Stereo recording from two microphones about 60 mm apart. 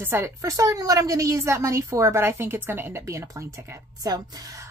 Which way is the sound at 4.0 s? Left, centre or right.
Right.